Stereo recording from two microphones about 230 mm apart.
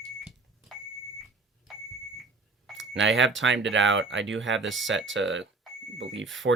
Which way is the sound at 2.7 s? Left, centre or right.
Right.